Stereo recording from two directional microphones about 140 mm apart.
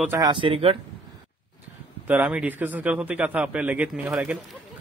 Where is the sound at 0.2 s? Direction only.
35° right (ahead or behind).